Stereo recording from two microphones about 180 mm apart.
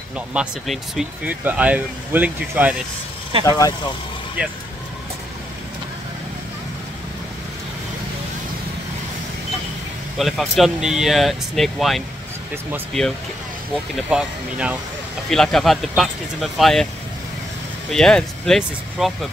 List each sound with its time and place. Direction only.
0.3 s speech: 5° right (ahead or behind)
3.4 s speech: 20° left (ahead or behind)
10.1 s speech: centre (ahead or behind)
14.0 s speech: 5° right (ahead or behind)
17.9 s speech: 5° left (ahead or behind)